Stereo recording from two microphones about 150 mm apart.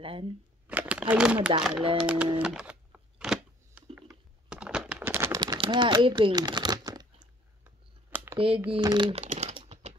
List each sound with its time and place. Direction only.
0.0 s speech: 35° right (ahead or behind)
0.7 s a sound: 10° right (ahead or behind)
1.6 s speech: 5° right (ahead or behind)
2.3 s music: 5° right (ahead or behind)
3.9 s typing: 5° right (ahead or behind)
5.4 s a sound: 30° right (ahead or behind)
7.6 s a sound: 15° right (ahead or behind)
8.6 s speech: 35° right (ahead or behind)
9.2 s typing: 50° right (ahead or behind)